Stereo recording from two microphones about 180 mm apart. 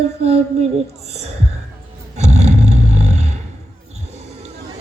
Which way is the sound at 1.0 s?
35° right (ahead or behind).